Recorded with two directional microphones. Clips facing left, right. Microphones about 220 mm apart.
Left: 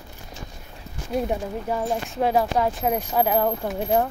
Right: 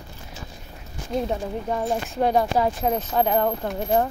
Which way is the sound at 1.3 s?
5° left (ahead or behind).